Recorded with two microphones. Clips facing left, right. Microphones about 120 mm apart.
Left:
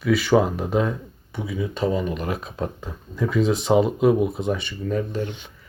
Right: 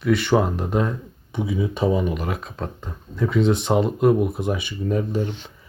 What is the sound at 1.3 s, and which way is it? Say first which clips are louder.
Speech: right 4 dB; 20° right (ahead or behind).